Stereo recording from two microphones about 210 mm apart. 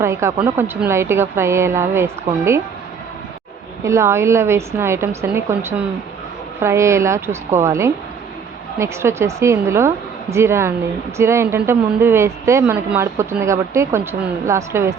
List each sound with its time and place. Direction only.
0.0 s a woman's voice: 15° right (ahead or behind)
3.8 s a woman's voice: 15° right (ahead or behind)